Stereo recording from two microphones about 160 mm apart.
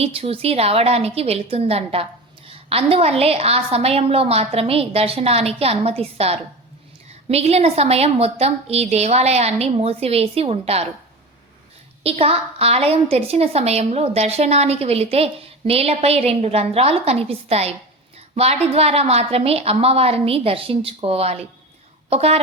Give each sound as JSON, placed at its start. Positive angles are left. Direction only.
{"t": 0.0, "sound": "a woman's voice", "side_deg": -40}
{"t": 12.0, "sound": "a woman's voice", "side_deg": -40}